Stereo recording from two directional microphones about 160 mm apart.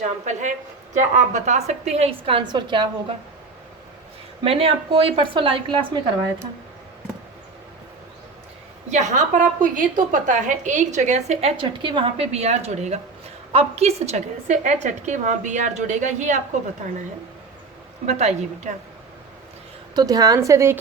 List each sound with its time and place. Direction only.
0.0 s a sound: 45° right (ahead or behind)
0.9 s a woman's voice: 50° right (ahead or behind); by 2.9 s 30° right (ahead or behind)
4.4 s a woman's voice: 35° right (ahead or behind)
8.9 s a woman's voice: 50° right (ahead or behind)
18.0 s a woman's voice: 45° right (ahead or behind)
20.0 s a woman's voice: 25° right (ahead or behind)